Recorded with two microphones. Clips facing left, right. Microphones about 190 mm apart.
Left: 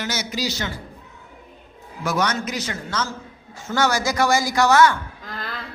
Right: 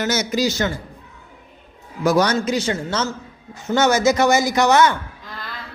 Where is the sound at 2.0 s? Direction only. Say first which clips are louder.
Right 6 dB; 35° right (ahead or behind); by 4.9 s 20° right (ahead or behind).